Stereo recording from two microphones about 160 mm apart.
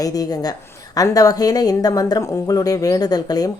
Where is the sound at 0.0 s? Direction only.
25° left (ahead or behind).